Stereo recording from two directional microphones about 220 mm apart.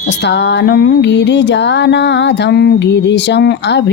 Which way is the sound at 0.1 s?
50° left (ahead or behind).